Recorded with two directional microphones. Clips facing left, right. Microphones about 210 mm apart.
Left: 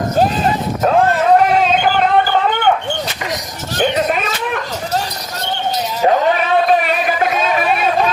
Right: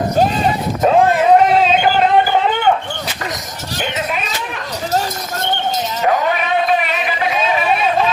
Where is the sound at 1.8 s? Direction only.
10° right (ahead or behind).